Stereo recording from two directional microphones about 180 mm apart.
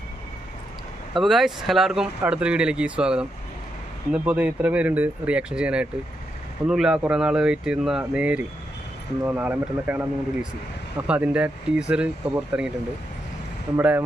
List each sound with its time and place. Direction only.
1.1 s speech: centre (ahead or behind)
13.7 s speech: 10° right (ahead or behind)